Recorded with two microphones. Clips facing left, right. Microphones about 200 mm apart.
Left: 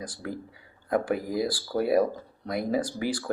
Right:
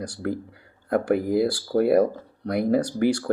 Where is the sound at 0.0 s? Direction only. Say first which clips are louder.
Right 7 dB; 65° right (ahead or behind).